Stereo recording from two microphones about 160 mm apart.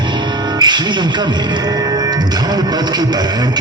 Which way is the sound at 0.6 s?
25° right (ahead or behind).